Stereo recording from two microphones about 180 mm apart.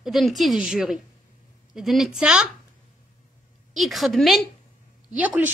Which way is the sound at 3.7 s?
Centre (ahead or behind).